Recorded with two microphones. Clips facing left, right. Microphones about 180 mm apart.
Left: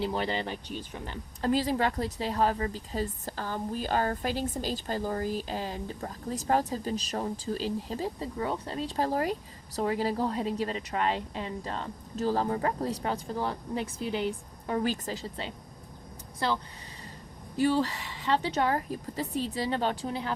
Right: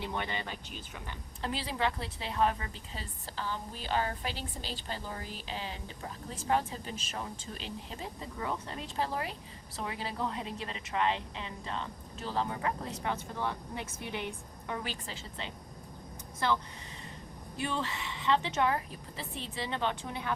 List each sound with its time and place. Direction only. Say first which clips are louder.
0.0 s speech: left 7 dB; 30° left (ahead or behind)
1.0 s speech: left 9 dB; 40° left (ahead or behind)
14.7 s speech: left 9 dB; 40° left (ahead or behind)
17.6 s speech: left 9 dB; 35° left (ahead or behind)